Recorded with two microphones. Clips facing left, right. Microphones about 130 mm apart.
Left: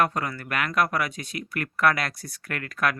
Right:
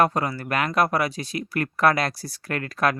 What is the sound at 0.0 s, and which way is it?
Speech, 30° right (ahead or behind).